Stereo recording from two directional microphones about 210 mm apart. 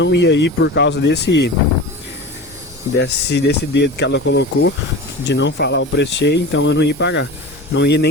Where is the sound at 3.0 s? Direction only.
55° left (ahead or behind).